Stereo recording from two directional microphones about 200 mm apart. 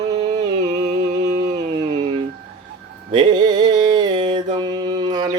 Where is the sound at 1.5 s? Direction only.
35° right (ahead or behind).